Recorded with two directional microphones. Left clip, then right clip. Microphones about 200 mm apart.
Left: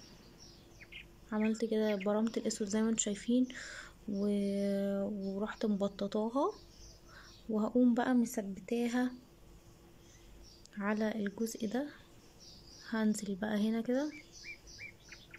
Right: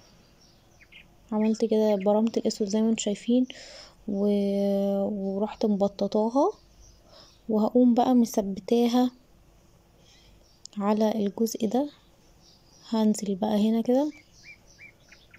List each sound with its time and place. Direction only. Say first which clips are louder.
1.3 s a woman's voice: right 9 dB; 10° right (ahead or behind)
10.6 s a woman's voice: right 11 dB; 20° right (ahead or behind)
14.1 s bird: even; centre (ahead or behind)